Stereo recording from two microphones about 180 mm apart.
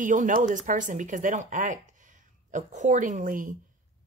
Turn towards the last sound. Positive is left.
turn(degrees=-50)  # may be behind; listen again after turning